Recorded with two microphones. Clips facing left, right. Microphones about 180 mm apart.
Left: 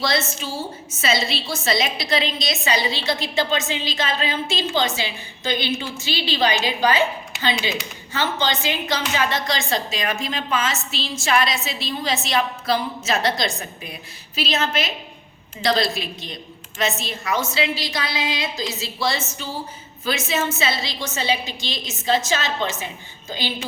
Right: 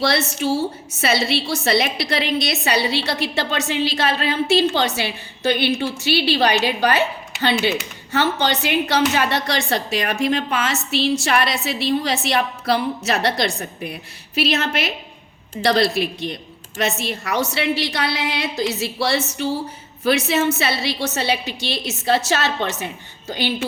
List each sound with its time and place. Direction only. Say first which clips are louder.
0.0 s a woman's voice: right 4 dB; 65° right (ahead or behind)